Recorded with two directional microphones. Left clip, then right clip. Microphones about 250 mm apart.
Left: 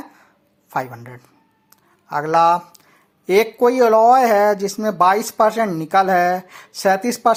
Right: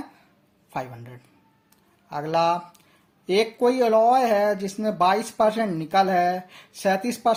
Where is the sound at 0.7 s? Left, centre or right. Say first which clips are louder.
Left 8 dB; centre.